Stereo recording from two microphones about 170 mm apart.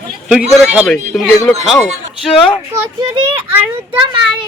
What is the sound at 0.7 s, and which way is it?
Speech, centre (ahead or behind).